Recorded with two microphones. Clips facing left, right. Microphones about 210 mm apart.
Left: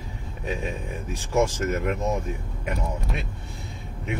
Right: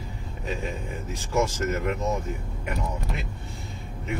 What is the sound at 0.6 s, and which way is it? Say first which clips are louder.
Speech: left 1 dB; 15° left (ahead or behind).